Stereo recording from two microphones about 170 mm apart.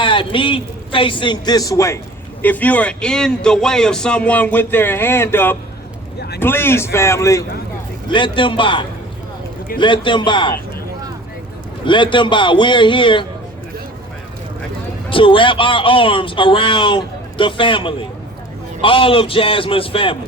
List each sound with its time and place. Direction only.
0.0 s a man's voice: 30° left (ahead or behind)
8.1 s a man's voice: 30° left (ahead or behind)
11.9 s a man's voice: 30° left (ahead or behind)
15.1 s a man's voice: 30° left (ahead or behind)